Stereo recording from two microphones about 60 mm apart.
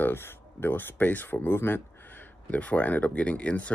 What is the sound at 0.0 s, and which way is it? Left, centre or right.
Speech, left.